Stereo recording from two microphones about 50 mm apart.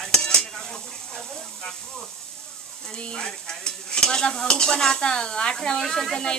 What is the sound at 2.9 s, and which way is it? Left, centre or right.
Stir, centre.